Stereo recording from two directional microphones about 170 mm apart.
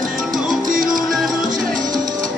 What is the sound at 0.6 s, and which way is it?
Music, 55° right (ahead or behind).